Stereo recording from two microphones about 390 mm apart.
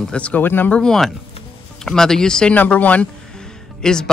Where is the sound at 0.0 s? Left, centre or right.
Centre.